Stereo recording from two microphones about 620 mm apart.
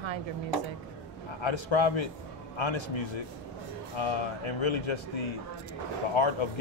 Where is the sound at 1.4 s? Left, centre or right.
Left.